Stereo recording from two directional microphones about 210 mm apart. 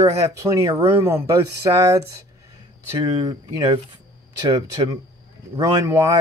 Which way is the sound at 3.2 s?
20° right (ahead or behind).